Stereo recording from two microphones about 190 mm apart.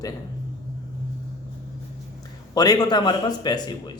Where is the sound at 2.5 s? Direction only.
20° left (ahead or behind).